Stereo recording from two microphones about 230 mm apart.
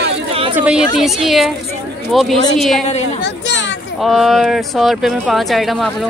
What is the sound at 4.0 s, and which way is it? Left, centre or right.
Speech, centre.